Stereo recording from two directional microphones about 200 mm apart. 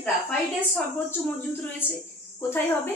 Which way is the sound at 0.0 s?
5° left (ahead or behind).